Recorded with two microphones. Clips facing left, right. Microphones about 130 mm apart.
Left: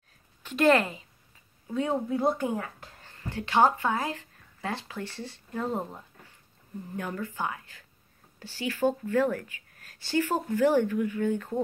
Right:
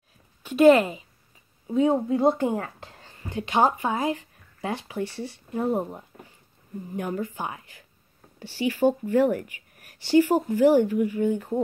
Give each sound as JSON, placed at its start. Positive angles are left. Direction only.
{"t": 0.4, "sound": "a woman's voice", "side_deg": -10}
{"t": 2.5, "sound": "speech", "side_deg": -40}
{"t": 3.1, "sound": "speech", "side_deg": -15}